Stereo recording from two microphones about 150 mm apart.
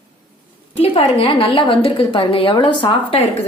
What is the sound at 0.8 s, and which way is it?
A woman's voice, 40° left (ahead or behind).